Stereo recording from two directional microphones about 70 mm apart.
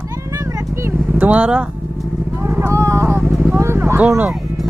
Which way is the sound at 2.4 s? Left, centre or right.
Right.